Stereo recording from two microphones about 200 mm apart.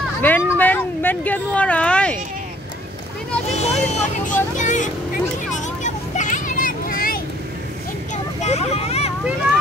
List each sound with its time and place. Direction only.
0.2 s a sound: 10° left (ahead or behind)
3.5 s music: 35° left (ahead or behind)
5.8 s vehicle: 40° left (ahead or behind)
8.4 s vehicle: 35° left (ahead or behind)